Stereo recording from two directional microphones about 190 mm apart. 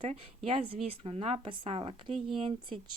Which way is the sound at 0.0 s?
30° right (ahead or behind).